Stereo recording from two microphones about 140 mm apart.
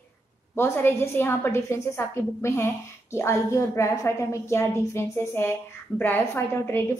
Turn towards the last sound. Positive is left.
turn(degrees=15)  # may be behind; listen again after turning